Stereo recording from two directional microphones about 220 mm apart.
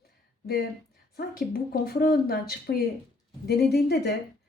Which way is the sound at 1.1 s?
45° left (ahead or behind).